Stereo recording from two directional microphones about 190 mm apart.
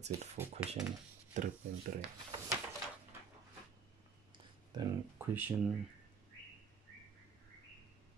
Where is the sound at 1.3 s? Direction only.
40° right (ahead or behind).